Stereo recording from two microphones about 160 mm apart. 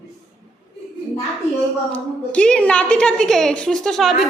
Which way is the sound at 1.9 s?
5° left (ahead or behind).